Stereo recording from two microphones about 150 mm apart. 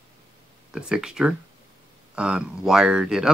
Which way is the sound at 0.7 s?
5° right (ahead or behind).